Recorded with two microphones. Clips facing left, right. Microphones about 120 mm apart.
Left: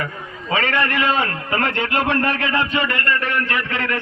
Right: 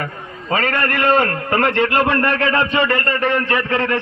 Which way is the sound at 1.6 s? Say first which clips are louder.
Right 5 dB; 35° right (ahead or behind).